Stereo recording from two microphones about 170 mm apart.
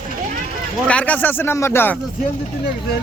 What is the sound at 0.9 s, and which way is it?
Speech, 10° left (ahead or behind).